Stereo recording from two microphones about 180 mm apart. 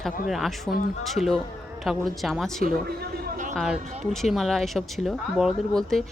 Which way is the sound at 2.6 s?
55° right (ahead or behind).